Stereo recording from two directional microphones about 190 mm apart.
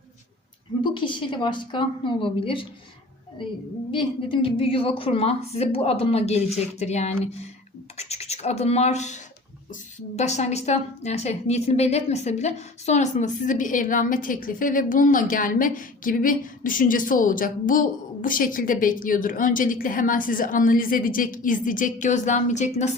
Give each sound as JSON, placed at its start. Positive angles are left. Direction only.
{"t": 0.8, "sound": "a woman's voice", "side_deg": 25}
{"t": 3.9, "sound": "a woman's voice", "side_deg": 25}